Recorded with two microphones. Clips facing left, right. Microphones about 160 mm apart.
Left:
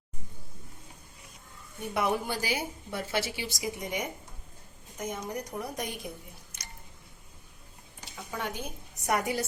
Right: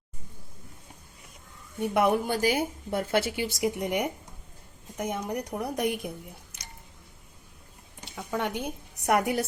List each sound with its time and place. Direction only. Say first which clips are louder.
1.9 s a woman's voice: right 5 dB; 55° right (ahead or behind)
8.3 s a woman's voice: right 6 dB; 65° right (ahead or behind)